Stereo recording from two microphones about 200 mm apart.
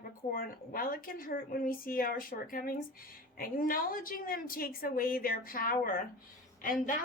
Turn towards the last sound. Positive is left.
turn(degrees=40)  # may be behind; listen again after turning